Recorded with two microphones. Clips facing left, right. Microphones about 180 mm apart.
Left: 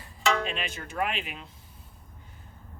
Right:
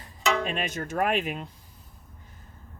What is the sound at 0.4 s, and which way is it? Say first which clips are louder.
Speech: right 4 dB; 45° right (ahead or behind).